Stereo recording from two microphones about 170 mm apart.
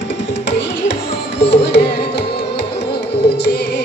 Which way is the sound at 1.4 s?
80° left.